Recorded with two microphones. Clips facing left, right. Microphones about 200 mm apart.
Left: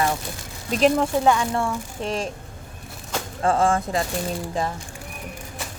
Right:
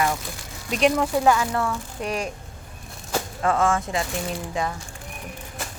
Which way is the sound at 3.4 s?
30° left (ahead or behind).